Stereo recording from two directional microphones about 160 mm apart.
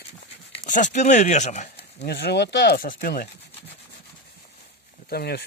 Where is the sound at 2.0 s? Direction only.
90° left; by 3.3 s 70° left (ahead or behind).